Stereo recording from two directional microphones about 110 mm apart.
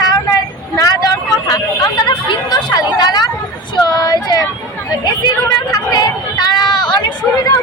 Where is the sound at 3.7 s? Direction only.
35° left (ahead or behind).